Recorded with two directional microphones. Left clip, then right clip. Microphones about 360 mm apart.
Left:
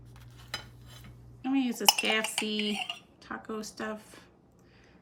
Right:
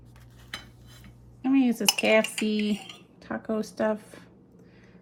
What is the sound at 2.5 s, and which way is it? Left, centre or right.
Dishes, right.